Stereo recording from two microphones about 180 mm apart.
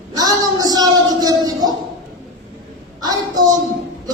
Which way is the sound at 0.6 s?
20° right (ahead or behind).